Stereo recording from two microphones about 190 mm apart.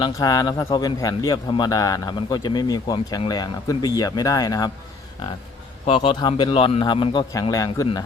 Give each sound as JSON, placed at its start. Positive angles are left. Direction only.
{"t": 0.0, "sound": "a man's voice", "side_deg": 20}
{"t": 5.8, "sound": "a man's voice", "side_deg": 30}